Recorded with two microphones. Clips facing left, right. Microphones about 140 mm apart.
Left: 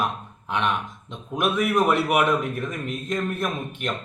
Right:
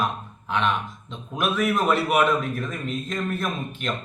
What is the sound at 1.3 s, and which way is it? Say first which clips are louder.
A man's voice: left 1 dB; 15° left (ahead or behind).